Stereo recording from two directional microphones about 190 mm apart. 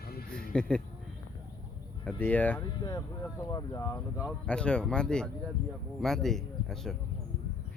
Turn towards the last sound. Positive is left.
turn(degrees=0)  # may be behind; listen again after turning